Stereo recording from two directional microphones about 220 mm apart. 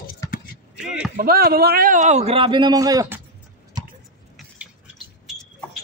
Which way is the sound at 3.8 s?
20° right (ahead or behind).